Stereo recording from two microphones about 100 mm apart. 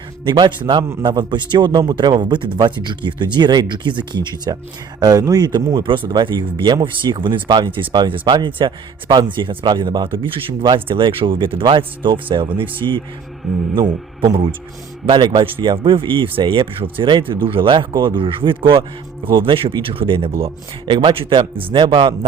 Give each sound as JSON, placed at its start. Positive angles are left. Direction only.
{"t": 0.3, "sound": "speech", "side_deg": -50}
{"t": 13.4, "sound": "speech", "side_deg": 0}
{"t": 15.0, "sound": "a man's voice", "side_deg": -50}